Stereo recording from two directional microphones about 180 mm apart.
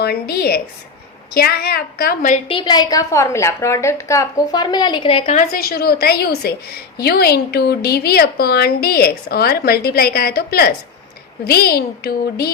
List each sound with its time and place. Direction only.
0.0 s a woman's voice: 60° left (ahead or behind)
2.5 s a woman's voice: 25° left (ahead or behind); by 12.5 s 60° left (ahead or behind)